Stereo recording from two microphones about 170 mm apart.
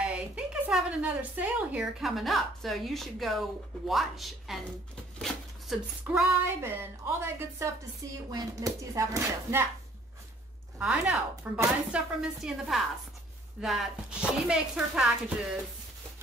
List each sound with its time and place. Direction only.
0.0 s speech: 5° right (ahead or behind)
6.4 s a woman's voice: 15° right (ahead or behind)
10.8 s speech: 5° right (ahead or behind)